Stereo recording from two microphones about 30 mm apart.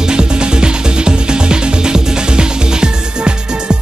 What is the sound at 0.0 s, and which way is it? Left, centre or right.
Music, right.